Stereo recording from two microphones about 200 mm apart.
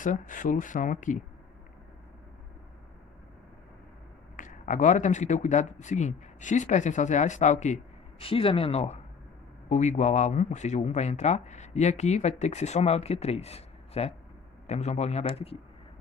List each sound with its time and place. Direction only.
0.0 s speech: 40° left (ahead or behind)
4.4 s speech: 40° left (ahead or behind)